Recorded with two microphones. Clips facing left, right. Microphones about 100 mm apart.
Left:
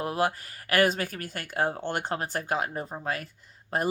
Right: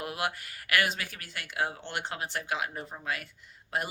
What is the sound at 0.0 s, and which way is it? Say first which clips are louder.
Speech: left 6 dB; 35° left (ahead or behind).